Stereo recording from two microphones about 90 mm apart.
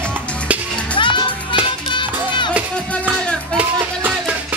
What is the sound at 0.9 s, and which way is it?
Music, 60° left (ahead or behind).